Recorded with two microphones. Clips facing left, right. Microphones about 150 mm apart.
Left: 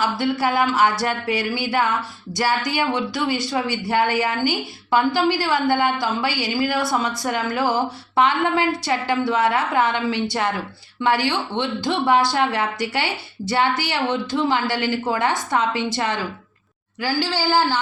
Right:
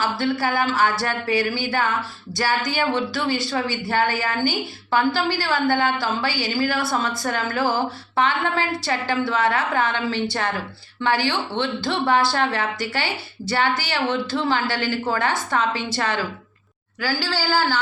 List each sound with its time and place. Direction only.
0.0 s a woman's voice: 20° left (ahead or behind)